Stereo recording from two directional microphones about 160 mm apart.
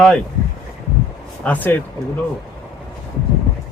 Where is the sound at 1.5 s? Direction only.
10° left (ahead or behind).